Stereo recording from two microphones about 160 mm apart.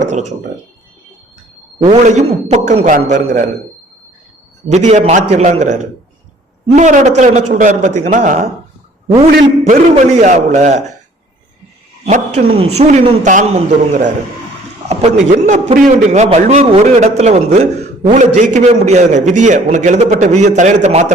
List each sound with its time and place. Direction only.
0.0 s a man's voice: 45° right (ahead or behind)
1.8 s a man's voice: 45° right (ahead or behind)
4.7 s a man's voice: 45° right (ahead or behind)
9.6 s a man's voice: 50° right (ahead or behind)
12.0 s a man's voice: 35° right (ahead or behind)